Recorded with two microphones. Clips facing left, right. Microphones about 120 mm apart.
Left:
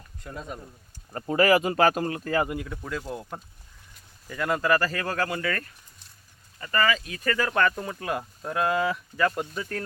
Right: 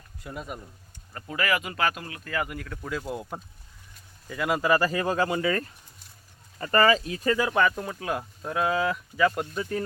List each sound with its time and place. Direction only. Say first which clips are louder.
0.2 s speech: right 1 dB; 5° right (ahead or behind)
1.1 s speech: left 7 dB; 35° left (ahead or behind)
2.8 s speech: right 1 dB; centre (ahead or behind); by 5.6 s 15° right (ahead or behind)
6.6 s speech: right 4 dB; 35° right (ahead or behind)
7.3 s speech: right 1 dB; 15° right (ahead or behind)